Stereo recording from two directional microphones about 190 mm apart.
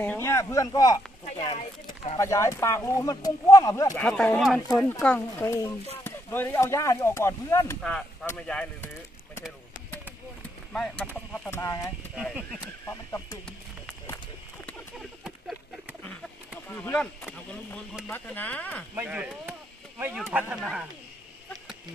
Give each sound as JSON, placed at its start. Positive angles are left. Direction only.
{"t": 0.0, "sound": "speech", "side_deg": 10}
{"t": 1.5, "sound": "speech", "side_deg": 30}
{"t": 2.1, "sound": "speech", "side_deg": 15}
{"t": 4.0, "sound": "speech", "side_deg": 5}
{"t": 10.7, "sound": "speech", "side_deg": 5}
{"t": 12.2, "sound": "speech", "side_deg": -5}
{"t": 12.8, "sound": "speech", "side_deg": 15}
{"t": 15.2, "sound": "a sound", "side_deg": -5}
{"t": 16.6, "sound": "speech", "side_deg": 10}
{"t": 18.9, "sound": "speech", "side_deg": -10}